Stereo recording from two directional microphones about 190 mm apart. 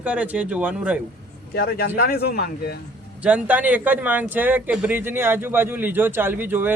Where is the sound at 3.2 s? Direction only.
5° right (ahead or behind).